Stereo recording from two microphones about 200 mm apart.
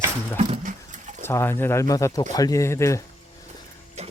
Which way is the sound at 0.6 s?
40° right (ahead or behind).